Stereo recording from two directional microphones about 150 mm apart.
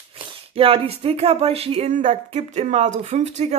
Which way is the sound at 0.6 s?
40° right (ahead or behind).